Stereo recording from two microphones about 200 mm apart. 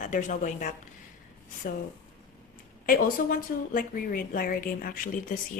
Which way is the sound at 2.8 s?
45° left (ahead or behind).